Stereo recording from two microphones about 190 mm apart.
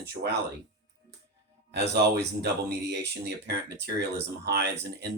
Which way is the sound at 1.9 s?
60° right (ahead or behind).